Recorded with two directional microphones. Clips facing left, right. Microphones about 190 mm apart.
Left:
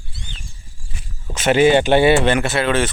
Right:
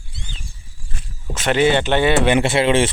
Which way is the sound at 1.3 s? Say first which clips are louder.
Left 3 dB; 5° left (ahead or behind).